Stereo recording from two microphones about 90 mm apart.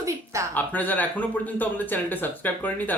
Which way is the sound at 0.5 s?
20° left (ahead or behind).